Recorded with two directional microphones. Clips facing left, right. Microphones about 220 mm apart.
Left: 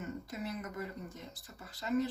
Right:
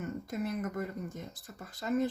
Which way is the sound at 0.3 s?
50° right (ahead or behind).